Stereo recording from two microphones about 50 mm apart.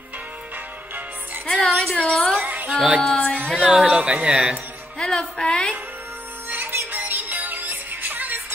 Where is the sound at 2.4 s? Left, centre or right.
Right.